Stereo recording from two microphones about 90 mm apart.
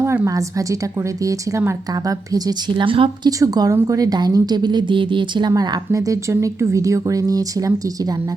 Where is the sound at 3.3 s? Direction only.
40° right (ahead or behind); by 5.5 s 65° right (ahead or behind).